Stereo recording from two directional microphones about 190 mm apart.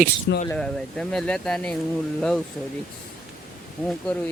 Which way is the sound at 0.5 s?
5° left (ahead or behind).